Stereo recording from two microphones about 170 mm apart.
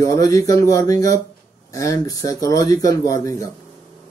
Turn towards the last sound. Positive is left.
turn(degrees=20)  # may be behind; listen again after turning